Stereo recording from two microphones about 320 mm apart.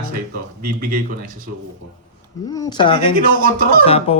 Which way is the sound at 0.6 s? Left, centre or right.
Right.